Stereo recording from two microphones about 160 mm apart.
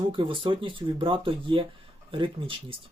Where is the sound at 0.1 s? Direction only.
30° right (ahead or behind).